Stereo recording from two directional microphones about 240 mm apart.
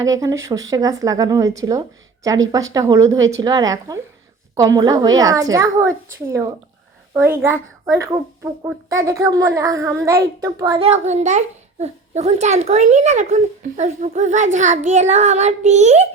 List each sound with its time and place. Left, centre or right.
0.0 s a woman's voice: centre
10.8 s a child's voice: right